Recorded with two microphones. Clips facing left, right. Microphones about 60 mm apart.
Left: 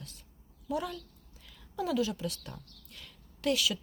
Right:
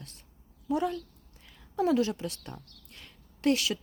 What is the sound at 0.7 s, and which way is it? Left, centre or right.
Speech, right.